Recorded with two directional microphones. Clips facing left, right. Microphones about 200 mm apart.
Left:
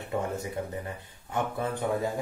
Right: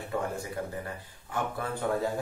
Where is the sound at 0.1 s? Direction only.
20° left (ahead or behind).